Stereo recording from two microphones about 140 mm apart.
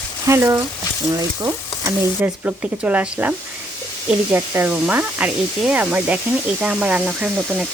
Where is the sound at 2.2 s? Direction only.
10° right (ahead or behind).